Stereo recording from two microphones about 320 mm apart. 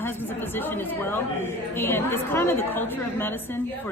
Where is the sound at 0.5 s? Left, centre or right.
Centre.